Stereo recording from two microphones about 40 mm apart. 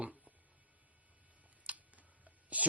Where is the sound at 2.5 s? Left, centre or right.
Right.